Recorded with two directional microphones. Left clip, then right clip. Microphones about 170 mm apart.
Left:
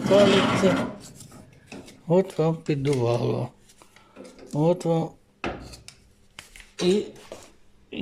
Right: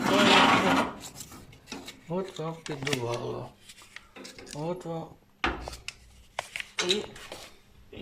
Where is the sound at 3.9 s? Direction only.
20° left (ahead or behind).